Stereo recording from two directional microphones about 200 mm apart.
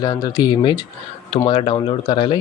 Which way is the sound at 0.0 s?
20° left (ahead or behind).